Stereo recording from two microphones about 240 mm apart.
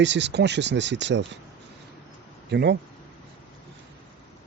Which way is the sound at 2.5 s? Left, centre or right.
Right.